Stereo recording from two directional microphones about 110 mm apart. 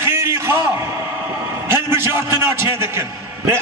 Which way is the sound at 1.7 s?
20° right (ahead or behind).